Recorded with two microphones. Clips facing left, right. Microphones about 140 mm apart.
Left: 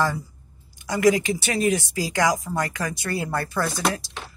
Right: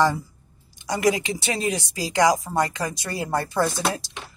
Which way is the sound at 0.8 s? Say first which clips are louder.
Left 3 dB; 20° right (ahead or behind).